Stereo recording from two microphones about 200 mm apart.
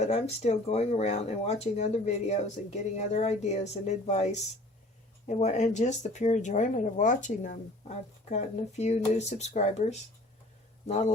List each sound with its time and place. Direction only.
0.0 s speech: 35° left (ahead or behind)